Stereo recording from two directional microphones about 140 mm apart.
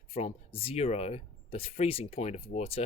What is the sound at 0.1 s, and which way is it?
Speech, 45° left (ahead or behind).